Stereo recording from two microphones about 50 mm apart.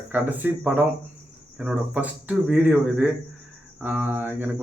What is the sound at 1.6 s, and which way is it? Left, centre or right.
Speech, right.